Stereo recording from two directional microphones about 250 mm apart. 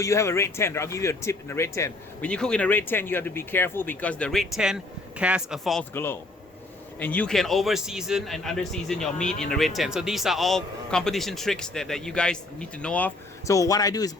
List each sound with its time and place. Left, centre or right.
0.0 s a man's voice: centre